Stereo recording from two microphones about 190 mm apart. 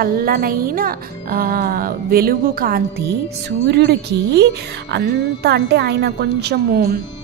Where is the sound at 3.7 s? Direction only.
60° right (ahead or behind).